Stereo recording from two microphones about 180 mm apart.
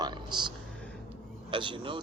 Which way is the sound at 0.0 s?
25° right (ahead or behind).